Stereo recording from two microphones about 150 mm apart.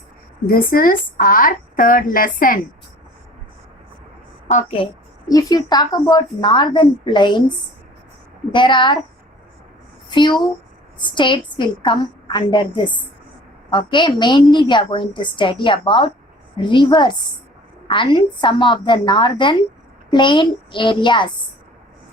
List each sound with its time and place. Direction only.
0.4 s a woman's voice: 75° left (ahead or behind)
5.3 s a woman's voice: 25° left (ahead or behind)
8.5 s a woman's voice: 30° left (ahead or behind)
10.1 s a woman's voice: 30° left (ahead or behind)